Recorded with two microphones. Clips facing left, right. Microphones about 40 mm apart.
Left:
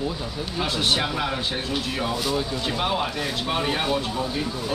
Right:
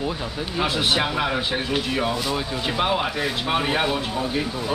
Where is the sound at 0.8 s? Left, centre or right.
Centre.